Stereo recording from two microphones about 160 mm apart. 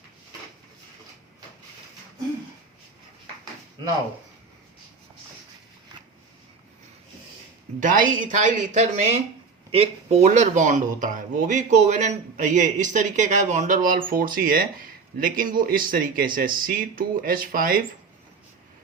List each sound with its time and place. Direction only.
7.8 s speech: 55° right (ahead or behind)
9.7 s speech: 40° right (ahead or behind); by 17.8 s 60° right (ahead or behind)